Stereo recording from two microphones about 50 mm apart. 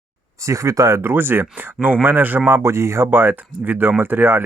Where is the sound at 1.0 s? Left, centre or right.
Right.